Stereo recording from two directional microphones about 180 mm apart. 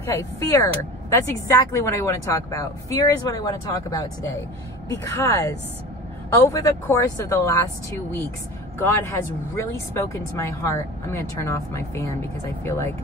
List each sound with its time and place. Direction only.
0.0 s speech: 15° left (ahead or behind)
8.7 s speech: 15° left (ahead or behind)